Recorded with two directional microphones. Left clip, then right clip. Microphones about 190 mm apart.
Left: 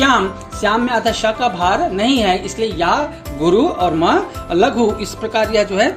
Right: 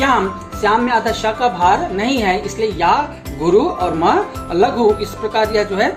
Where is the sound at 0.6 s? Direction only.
40° left (ahead or behind).